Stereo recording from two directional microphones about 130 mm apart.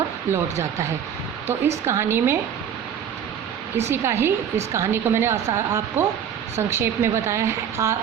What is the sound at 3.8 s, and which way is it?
A woman's voice, 20° right (ahead or behind).